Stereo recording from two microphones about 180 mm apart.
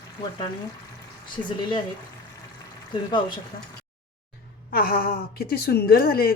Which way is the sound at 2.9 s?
25° left (ahead or behind).